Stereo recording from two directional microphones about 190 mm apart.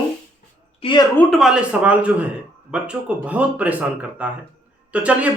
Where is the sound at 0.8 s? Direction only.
25° left (ahead or behind).